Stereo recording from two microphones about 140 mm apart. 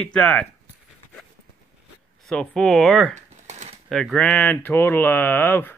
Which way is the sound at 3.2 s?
55° right (ahead or behind).